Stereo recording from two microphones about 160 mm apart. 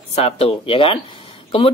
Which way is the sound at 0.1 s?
40° left (ahead or behind).